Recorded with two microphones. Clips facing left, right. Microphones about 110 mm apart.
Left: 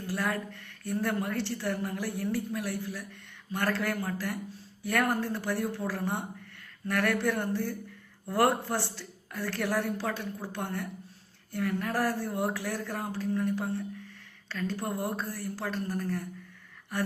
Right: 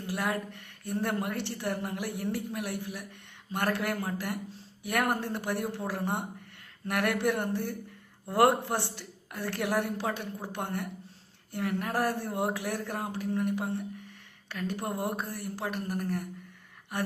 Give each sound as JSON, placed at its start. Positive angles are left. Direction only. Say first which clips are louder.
{"t": 0.0, "sound": "a woman's voice", "louder": "even", "side_deg": -20}